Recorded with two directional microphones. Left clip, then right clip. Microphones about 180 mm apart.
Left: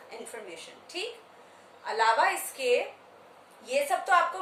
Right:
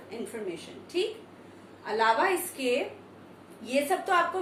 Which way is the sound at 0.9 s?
15° left (ahead or behind).